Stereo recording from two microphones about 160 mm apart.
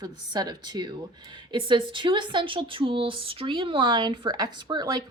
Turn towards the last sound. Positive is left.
turn(degrees=-25)  # may be behind; listen again after turning